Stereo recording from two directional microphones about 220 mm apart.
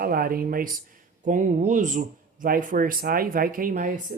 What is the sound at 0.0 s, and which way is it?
Speech, 40° right (ahead or behind).